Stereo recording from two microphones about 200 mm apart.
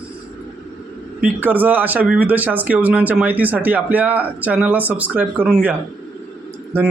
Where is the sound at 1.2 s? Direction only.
10° right (ahead or behind).